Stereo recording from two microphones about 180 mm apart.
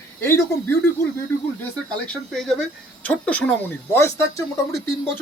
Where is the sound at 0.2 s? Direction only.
10° left (ahead or behind).